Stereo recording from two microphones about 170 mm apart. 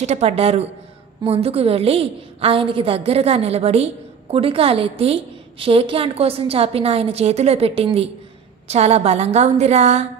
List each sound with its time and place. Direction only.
0.0 s a woman's voice: 40° right (ahead or behind)